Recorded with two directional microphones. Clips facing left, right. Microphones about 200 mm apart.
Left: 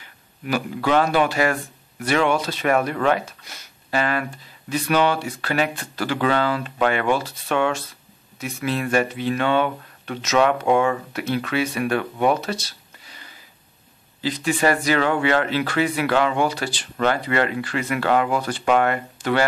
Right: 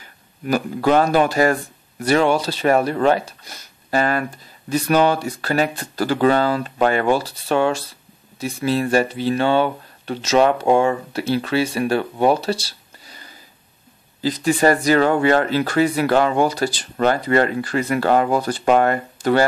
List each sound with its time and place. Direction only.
0.0 s speech: 40° right (ahead or behind)